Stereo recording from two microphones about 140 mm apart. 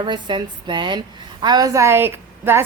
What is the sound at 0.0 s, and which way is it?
A woman's voice, 35° right (ahead or behind).